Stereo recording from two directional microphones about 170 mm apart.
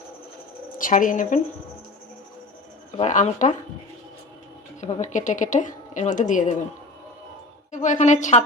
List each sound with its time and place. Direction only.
0.8 s a woman's voice: 50° left (ahead or behind)
3.0 s a woman's voice: 45° left (ahead or behind)
4.8 s a woman's voice: 45° left (ahead or behind)
7.7 s a woman's voice: 45° left (ahead or behind)